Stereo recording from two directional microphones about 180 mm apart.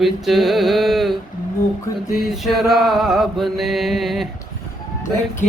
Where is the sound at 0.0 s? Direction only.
Centre (ahead or behind).